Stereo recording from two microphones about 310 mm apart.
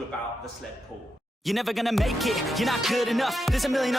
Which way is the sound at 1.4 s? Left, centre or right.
Centre.